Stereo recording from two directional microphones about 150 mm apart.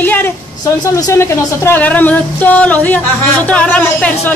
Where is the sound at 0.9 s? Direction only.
20° left (ahead or behind).